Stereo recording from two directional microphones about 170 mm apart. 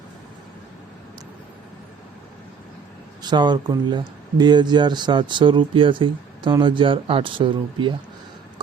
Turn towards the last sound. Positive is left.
turn(degrees=-30)  # may be behind; listen again after turning